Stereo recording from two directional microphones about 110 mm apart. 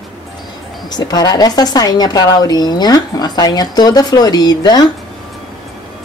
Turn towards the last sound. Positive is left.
turn(degrees=35)  # may be behind; listen again after turning